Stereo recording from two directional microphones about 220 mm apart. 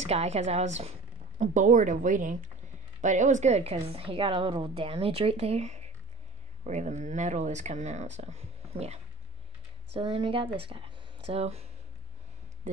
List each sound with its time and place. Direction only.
0.0 s a woman's voice: 30° right (ahead or behind)